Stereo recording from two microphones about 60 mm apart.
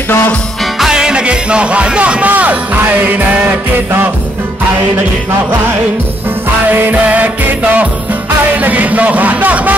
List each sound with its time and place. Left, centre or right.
0.7 s speech: centre; by 3.5 s right
6.7 s music: right
8.5 s speech: right